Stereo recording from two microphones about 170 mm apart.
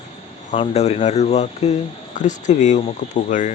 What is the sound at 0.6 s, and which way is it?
Speech, 40° left (ahead or behind).